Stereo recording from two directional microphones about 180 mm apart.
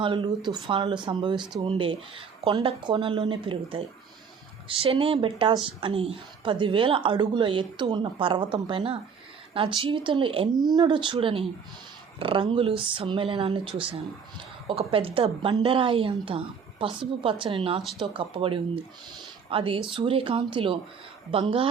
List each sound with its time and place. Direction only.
0.0 s a woman's voice: 25° right (ahead or behind)